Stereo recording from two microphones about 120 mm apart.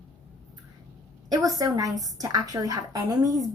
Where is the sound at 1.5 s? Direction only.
30° right (ahead or behind).